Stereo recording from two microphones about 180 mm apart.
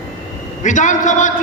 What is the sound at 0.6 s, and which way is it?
Speech, 45° left (ahead or behind).